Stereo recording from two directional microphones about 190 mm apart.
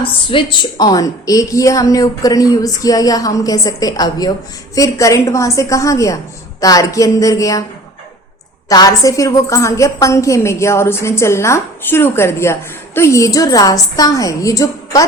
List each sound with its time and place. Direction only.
0.0 s a woman's voice: 25° left (ahead or behind)
8.7 s a woman's voice: 20° left (ahead or behind)